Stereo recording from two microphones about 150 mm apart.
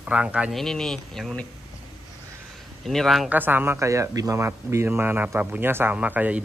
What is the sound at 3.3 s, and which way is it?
Speech, 15° right (ahead or behind).